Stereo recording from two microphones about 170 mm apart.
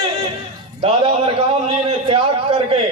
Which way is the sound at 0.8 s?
35° right (ahead or behind).